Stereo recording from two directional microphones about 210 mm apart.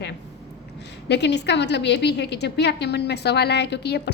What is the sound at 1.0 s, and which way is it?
A woman's voice, 55° left (ahead or behind).